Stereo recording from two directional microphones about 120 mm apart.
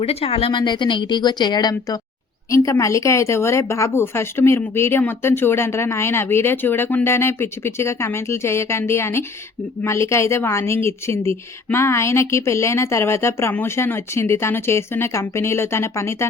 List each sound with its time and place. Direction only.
0.0 s speech: 55° left (ahead or behind)
0.6 s a woman's voice: 40° left (ahead or behind); by 16.3 s 20° left (ahead or behind)